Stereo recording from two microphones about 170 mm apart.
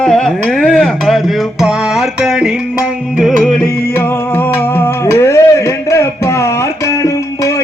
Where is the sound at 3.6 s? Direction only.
15° left (ahead or behind).